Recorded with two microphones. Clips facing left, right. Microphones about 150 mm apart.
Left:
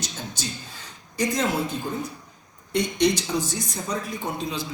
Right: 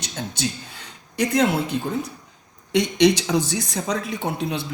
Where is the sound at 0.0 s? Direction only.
65° right (ahead or behind).